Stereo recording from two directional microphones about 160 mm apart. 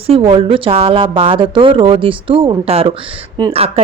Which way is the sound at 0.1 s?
35° right (ahead or behind).